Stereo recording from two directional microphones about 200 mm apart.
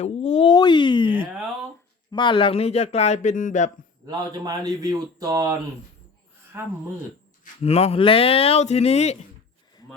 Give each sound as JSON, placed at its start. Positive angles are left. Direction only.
{"t": 0.0, "sound": "speech", "side_deg": 30}
{"t": 4.0, "sound": "speech", "side_deg": -20}
{"t": 7.6, "sound": "speech", "side_deg": 30}